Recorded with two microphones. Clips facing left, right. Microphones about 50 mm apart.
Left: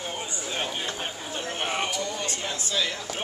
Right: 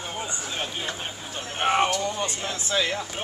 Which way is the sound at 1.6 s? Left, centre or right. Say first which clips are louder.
Right 8 dB; right.